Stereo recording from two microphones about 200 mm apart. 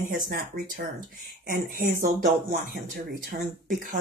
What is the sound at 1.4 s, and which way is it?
Speech, 40° right (ahead or behind).